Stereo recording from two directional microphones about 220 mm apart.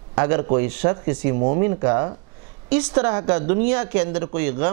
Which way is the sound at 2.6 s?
10° right (ahead or behind).